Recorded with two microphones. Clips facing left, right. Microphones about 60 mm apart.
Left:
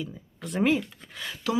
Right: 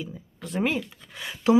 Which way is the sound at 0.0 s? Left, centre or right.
Centre.